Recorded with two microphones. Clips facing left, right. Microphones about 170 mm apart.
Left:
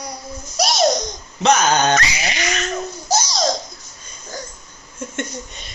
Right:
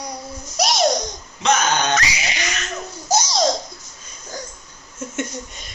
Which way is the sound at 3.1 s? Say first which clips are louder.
Right 1 dB; 15° right (ahead or behind).